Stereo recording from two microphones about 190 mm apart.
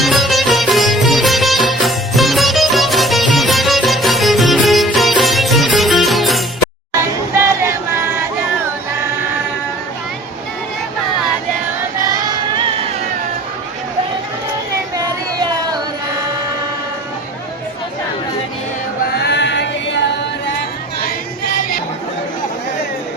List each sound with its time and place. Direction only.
0.0 s music: centre (ahead or behind)
7.0 s a sound: 15° right (ahead or behind)
12.3 s music: 25° right (ahead or behind)
19.1 s chant: 60° left (ahead or behind)